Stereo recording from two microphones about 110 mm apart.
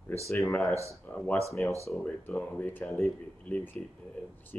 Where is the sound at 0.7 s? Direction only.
25° right (ahead or behind).